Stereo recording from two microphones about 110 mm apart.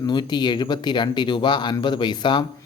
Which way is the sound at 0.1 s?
40° left (ahead or behind).